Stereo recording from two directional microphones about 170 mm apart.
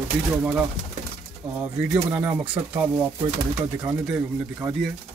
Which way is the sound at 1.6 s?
10° right (ahead or behind).